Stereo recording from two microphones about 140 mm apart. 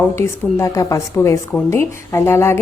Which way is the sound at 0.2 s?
20° left (ahead or behind).